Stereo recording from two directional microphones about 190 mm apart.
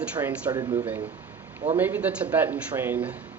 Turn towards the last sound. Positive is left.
turn(degrees=-10)  # may be behind; listen again after turning